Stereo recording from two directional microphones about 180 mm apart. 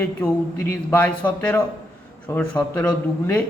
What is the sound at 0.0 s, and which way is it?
A man's voice, 10° left (ahead or behind).